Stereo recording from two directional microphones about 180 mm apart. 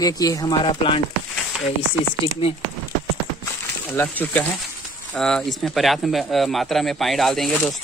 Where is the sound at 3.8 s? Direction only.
10° left (ahead or behind).